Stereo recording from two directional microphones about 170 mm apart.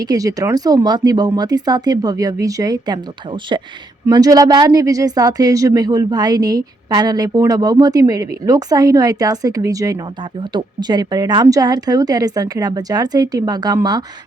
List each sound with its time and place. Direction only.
0.0 s speech: 20° right (ahead or behind)